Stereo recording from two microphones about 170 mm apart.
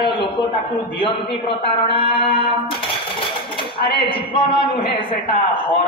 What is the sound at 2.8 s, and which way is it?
Typewriter, 30° left (ahead or behind).